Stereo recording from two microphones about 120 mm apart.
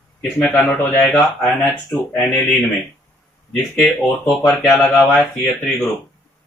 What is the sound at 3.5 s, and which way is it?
Speech, 5° left (ahead or behind).